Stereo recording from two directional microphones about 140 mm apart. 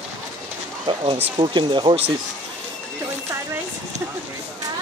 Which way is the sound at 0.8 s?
40° right (ahead or behind).